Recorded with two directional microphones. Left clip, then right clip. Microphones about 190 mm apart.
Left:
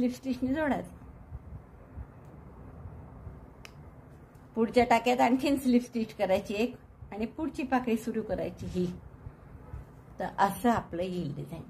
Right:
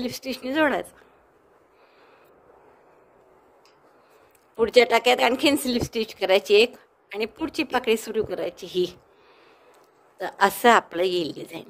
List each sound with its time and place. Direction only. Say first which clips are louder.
0.0 s speech: right 2 dB; 50° right (ahead or behind)
4.6 s speech: right 7 dB; 50° right (ahead or behind)
10.1 s speech: right 6 dB; 50° right (ahead or behind)